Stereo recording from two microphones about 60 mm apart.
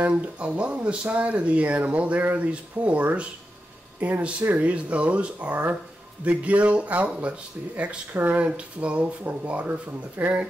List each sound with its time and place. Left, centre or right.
0.0 s speech: centre